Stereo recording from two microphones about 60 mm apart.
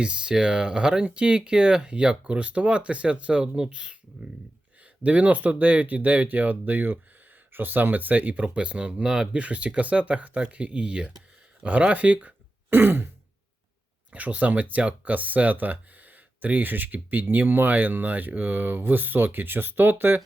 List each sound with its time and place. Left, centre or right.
0.0 s speech: centre
5.0 s speech: right
12.7 s speech: right
14.1 s speech: right